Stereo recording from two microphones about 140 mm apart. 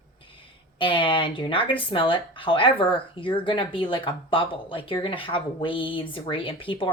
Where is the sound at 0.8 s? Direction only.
35° left (ahead or behind).